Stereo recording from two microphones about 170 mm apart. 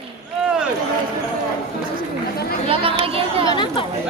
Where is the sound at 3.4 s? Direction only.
30° left (ahead or behind).